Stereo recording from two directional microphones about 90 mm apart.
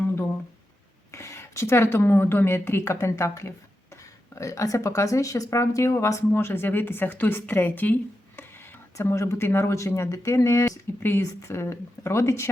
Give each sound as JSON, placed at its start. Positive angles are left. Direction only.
{"t": 1.1, "sound": "a woman's voice", "side_deg": 30}
{"t": 9.0, "sound": "speech", "side_deg": 35}